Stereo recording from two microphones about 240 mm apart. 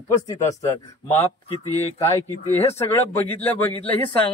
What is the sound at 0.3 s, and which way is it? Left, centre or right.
Speech, centre.